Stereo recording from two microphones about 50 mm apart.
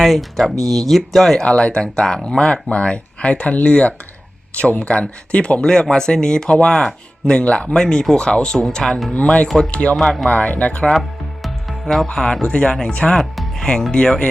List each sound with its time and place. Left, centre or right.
0.0 s speech: centre
1.4 s speech: centre
9.1 s speech: left
11.4 s music: centre
12.0 s speech: centre
13.3 s music: centre
13.9 s speech: centre